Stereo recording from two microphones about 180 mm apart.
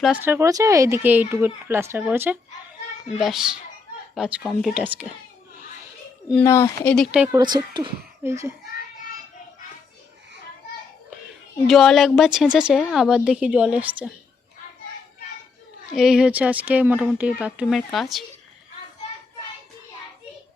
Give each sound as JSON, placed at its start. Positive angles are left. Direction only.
{"t": 0.0, "sound": "a woman's voice", "side_deg": -10}
{"t": 6.3, "sound": "speech", "side_deg": 15}
{"t": 6.9, "sound": "a woman's voice", "side_deg": 0}
{"t": 7.3, "sound": "a woman's voice", "side_deg": -25}
{"t": 8.2, "sound": "speech", "side_deg": -15}
{"t": 11.7, "sound": "a woman's voice", "side_deg": 0}
{"t": 15.9, "sound": "a woman's voice", "side_deg": -5}